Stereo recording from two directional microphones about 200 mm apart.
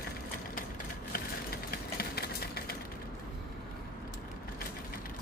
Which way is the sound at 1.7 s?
50° left (ahead or behind).